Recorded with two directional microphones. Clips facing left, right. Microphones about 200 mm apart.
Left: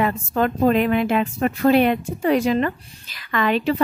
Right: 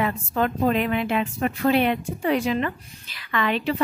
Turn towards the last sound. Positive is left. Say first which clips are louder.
# left 4 dB
turn(degrees=45)  # may be behind; listen again after turning